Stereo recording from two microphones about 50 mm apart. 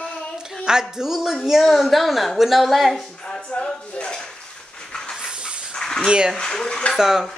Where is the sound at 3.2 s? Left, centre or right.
Centre.